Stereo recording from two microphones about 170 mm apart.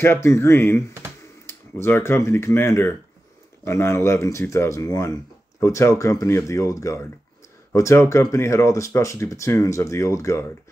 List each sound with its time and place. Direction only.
0.0 s speech: 15° left (ahead or behind)